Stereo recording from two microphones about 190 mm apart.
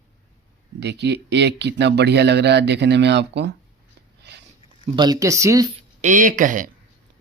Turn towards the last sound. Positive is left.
turn(degrees=-45)  # may be behind; listen again after turning